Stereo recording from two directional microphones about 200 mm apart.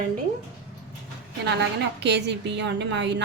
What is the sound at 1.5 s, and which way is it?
A woman's voice, 60° right (ahead or behind).